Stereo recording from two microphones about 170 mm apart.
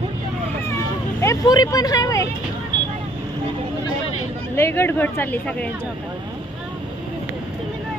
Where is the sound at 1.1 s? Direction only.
20° left (ahead or behind).